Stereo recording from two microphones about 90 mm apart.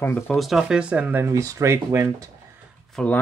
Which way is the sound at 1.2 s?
35° right (ahead or behind).